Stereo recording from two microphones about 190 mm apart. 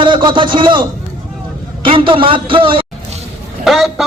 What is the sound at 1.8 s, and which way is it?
A man's voice, 25° right (ahead or behind).